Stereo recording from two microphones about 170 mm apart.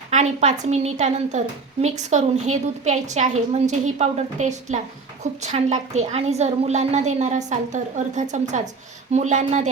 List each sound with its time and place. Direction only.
0.1 s a woman's voice: 45° right (ahead or behind)